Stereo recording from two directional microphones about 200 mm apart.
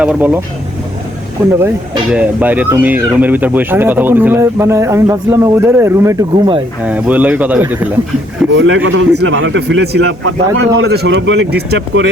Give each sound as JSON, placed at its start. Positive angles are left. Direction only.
{"t": 0.0, "sound": "speech", "side_deg": -5}
{"t": 1.5, "sound": "speech", "side_deg": -10}
{"t": 6.8, "sound": "speech", "side_deg": -5}
{"t": 8.5, "sound": "a man's voice", "side_deg": -70}